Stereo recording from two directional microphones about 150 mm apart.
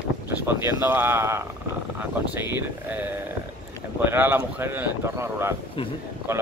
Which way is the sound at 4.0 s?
15° right (ahead or behind).